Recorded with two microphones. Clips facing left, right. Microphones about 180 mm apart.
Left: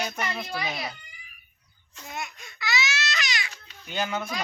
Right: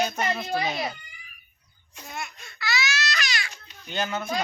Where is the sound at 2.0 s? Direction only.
20° left (ahead or behind).